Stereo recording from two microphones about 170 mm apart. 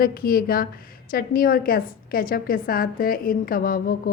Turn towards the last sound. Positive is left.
turn(degrees=60)  # may be behind; listen again after turning